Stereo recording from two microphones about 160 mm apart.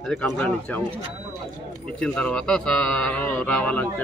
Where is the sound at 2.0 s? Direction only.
5° left (ahead or behind).